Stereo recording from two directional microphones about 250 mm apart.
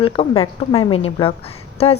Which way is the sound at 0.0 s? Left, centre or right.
Left.